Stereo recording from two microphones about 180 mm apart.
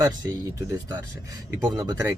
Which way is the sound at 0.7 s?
15° right (ahead or behind).